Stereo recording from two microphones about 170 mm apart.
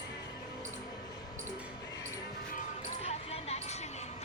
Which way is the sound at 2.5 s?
40° left (ahead or behind).